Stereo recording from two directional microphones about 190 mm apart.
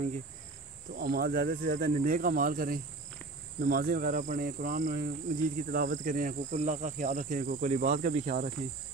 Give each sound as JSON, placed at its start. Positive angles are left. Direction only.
{"t": 0.9, "sound": "speech", "side_deg": -55}